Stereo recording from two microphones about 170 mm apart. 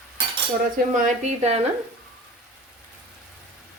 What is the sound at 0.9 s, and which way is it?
Speech, 45° right (ahead or behind).